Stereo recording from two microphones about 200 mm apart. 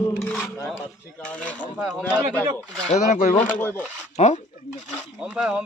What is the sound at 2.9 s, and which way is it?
Speech, 35° left (ahead or behind).